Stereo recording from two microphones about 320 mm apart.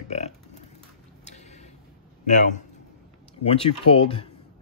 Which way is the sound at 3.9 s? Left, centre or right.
Centre.